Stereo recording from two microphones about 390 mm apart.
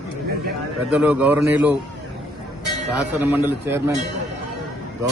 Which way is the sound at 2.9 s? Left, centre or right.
Centre.